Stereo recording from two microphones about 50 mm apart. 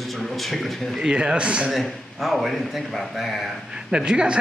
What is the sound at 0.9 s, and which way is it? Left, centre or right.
Speech, centre.